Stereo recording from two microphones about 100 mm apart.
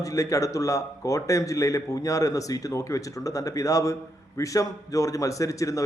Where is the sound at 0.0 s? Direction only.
35° left (ahead or behind).